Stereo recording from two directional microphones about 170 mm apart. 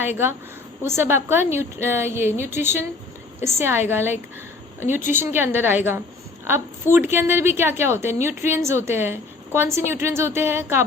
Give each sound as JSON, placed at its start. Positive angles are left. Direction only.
{"t": 0.0, "sound": "a woman's voice", "side_deg": -15}